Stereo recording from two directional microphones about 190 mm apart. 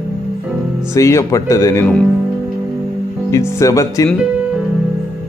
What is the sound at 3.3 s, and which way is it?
Speech, 15° left (ahead or behind).